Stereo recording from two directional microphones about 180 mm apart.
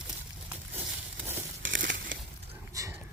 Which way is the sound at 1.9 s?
85° right.